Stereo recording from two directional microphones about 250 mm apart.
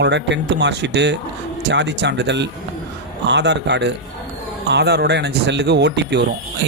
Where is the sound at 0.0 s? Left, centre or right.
Right.